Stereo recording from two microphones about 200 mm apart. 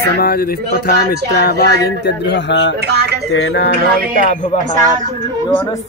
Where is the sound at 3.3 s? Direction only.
60° left (ahead or behind).